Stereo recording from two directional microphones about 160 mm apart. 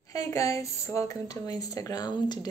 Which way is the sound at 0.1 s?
20° left (ahead or behind).